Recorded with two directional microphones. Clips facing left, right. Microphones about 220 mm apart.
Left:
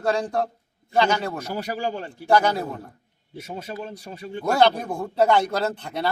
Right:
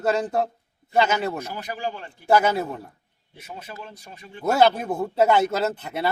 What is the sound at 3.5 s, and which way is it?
Speech, 30° left (ahead or behind).